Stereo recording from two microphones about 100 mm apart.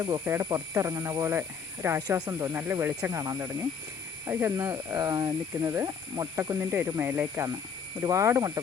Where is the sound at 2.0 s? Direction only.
40° right (ahead or behind).